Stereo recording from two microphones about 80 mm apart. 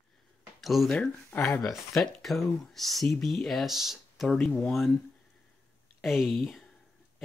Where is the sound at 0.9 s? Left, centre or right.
Centre.